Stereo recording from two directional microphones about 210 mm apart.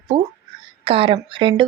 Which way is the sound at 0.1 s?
25° right (ahead or behind).